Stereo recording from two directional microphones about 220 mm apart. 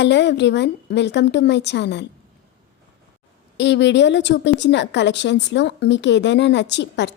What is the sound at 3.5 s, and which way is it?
A woman's voice, 55° left (ahead or behind).